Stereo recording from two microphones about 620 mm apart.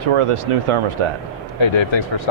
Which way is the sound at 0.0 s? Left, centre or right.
Right.